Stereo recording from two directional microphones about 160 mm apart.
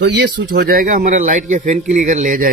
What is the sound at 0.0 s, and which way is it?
Speech, 90° right.